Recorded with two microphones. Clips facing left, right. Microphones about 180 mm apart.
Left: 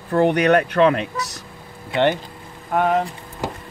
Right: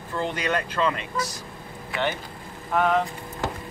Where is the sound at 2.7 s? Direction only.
40° left (ahead or behind).